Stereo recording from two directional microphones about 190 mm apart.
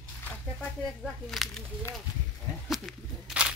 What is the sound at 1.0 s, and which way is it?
Speech, centre (ahead or behind).